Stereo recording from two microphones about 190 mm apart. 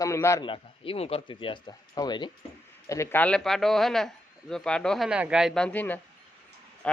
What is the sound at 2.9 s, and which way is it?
Speech, 15° left (ahead or behind).